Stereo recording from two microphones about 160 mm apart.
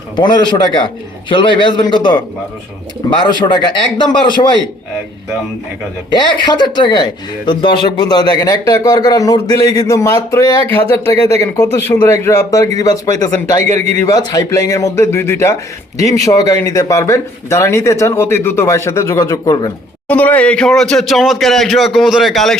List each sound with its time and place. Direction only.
0.2 s a man's voice: 30° left (ahead or behind)
6.1 s a man's voice: 25° left (ahead or behind)
13.7 s a man's voice: 45° right (ahead or behind)
14.0 s a man's voice: 20° left (ahead or behind)
20.1 s speech: 10° left (ahead or behind)